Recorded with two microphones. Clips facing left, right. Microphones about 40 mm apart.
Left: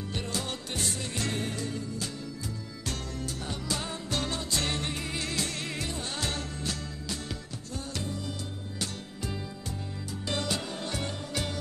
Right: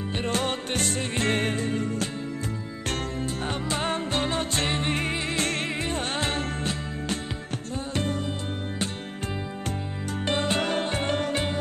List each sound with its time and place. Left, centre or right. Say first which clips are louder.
0.1 s music: right 8 dB; right
3.2 s music: right 7 dB; right
10.3 s music: right 5 dB; right
10.6 s music: right 11 dB; right
10.9 s music: right 8 dB; right